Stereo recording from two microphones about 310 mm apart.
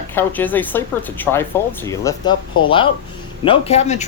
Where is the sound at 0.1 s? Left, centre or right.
Centre.